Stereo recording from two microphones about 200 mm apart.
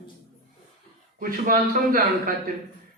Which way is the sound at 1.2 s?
45° right (ahead or behind).